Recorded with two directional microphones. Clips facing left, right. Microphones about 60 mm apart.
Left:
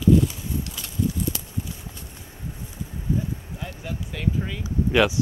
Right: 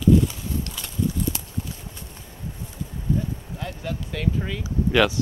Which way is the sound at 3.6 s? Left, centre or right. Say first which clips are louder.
Right 6 dB; centre.